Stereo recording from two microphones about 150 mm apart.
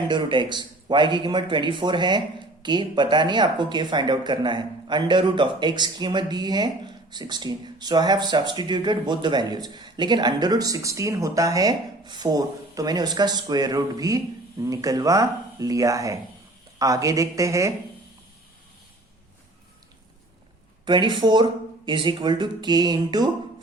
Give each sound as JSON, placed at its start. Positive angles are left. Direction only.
{"t": 0.1, "sound": "speech", "side_deg": -30}
{"t": 20.8, "sound": "speech", "side_deg": -30}